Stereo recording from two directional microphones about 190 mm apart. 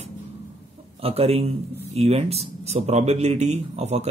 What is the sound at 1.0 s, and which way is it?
Speech, 30° right (ahead or behind).